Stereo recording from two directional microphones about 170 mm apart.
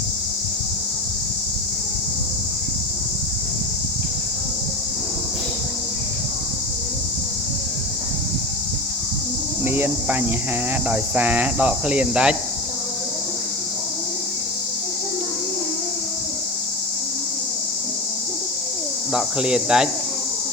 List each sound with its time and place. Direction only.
9.6 s speech: 10° right (ahead or behind)
19.1 s speech: 5° right (ahead or behind)